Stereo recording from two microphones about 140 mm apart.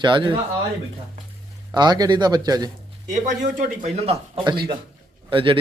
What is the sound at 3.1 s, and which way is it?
Speech, 65° right (ahead or behind).